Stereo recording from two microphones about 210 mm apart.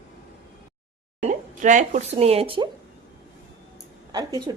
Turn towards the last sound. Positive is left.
turn(degrees=-20)  # may be behind; listen again after turning